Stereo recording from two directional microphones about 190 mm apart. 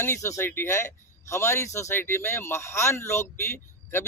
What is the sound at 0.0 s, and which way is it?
Speech, 15° left (ahead or behind).